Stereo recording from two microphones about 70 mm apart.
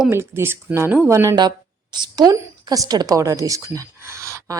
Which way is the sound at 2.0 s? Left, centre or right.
Right.